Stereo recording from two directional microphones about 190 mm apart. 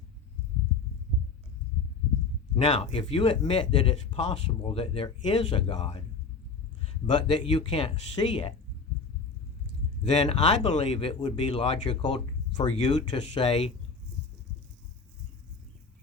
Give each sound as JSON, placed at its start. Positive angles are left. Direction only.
{"t": 2.6, "sound": "speech", "side_deg": 25}
{"t": 7.1, "sound": "speech", "side_deg": 25}
{"t": 10.0, "sound": "speech", "side_deg": 35}